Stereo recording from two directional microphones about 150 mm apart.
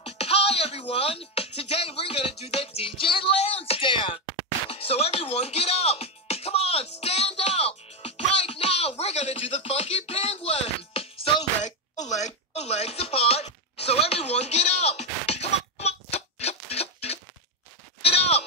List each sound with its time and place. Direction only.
0.0 s speech: 40° left (ahead or behind)
4.6 s music: 40° left (ahead or behind)
12.5 s chopping: 45° left (ahead or behind)
15.8 s a sound: 45° left (ahead or behind)
18.0 s sheep: 45° left (ahead or behind)